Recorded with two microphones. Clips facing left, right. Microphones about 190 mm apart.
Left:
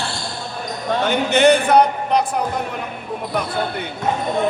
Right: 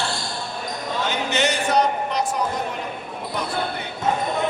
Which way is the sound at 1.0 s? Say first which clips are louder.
Left 9 dB; 55° left (ahead or behind).